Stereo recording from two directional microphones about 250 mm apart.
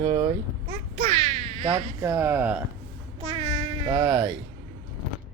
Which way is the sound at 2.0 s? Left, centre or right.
Centre.